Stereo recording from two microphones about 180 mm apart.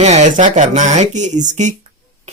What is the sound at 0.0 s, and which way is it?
Speech, 40° right (ahead or behind).